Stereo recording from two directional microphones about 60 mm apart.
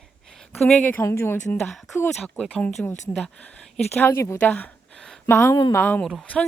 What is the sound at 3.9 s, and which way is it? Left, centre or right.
Speech, left.